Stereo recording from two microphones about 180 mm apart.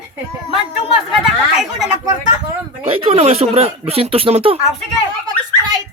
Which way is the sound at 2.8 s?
35° right (ahead or behind).